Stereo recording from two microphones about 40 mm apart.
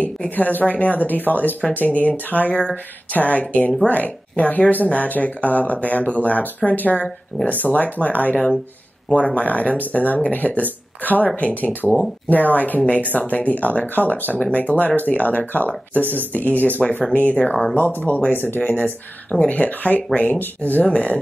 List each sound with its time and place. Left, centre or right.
0.4 s speech: left
17.7 s speech: left
18.6 s speech: left
20.8 s speech: left